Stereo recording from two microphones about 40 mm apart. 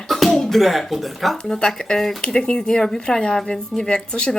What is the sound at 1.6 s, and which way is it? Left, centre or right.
A woman's voice, centre.